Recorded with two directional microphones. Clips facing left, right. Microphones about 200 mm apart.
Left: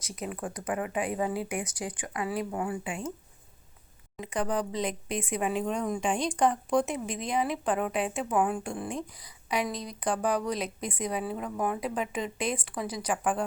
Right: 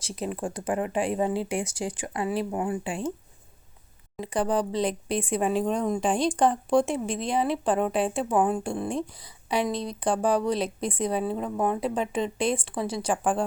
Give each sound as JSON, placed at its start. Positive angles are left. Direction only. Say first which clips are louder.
{"t": 0.0, "sound": "speech", "louder": "right 5 dB", "side_deg": -30}
{"t": 4.2, "sound": "speech", "louder": "right 4 dB", "side_deg": -30}